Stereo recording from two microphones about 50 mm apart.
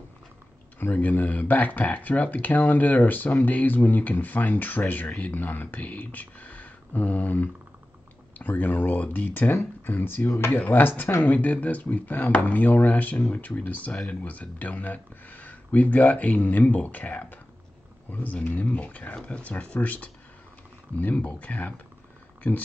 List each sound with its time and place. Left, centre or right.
0.7 s speech: left
11.2 s speech: left
21.0 s speech: left